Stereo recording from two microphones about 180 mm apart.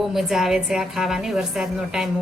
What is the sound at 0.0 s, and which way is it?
A woman's voice, centre (ahead or behind).